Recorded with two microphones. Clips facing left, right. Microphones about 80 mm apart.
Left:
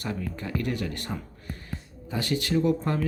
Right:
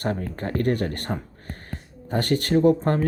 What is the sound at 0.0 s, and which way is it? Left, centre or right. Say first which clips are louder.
Speech: right 5 dB; right.